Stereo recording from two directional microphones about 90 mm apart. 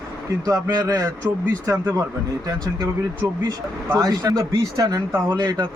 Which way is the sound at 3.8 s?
25° right (ahead or behind).